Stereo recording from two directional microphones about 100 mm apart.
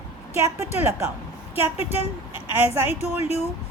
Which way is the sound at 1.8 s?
90° left.